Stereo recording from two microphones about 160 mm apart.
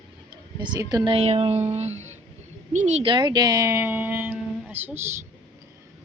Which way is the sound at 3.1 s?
25° right (ahead or behind).